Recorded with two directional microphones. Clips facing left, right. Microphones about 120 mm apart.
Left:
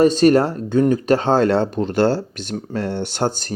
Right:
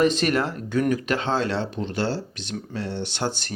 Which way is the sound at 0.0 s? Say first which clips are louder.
Left 8 dB; 35° left (ahead or behind).